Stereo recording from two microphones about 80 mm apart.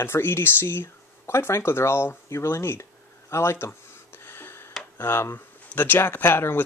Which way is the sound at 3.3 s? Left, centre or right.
Left.